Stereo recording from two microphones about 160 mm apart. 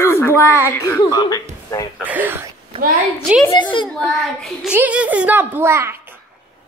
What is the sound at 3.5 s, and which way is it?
Speech, 30° left (ahead or behind).